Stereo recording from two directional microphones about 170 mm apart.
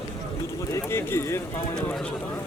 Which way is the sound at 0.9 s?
15° left (ahead or behind).